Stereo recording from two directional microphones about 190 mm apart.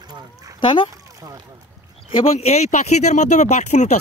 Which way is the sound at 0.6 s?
25° left (ahead or behind).